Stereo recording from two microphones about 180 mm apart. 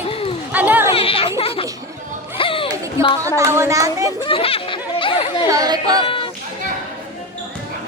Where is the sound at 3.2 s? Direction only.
15° right (ahead or behind).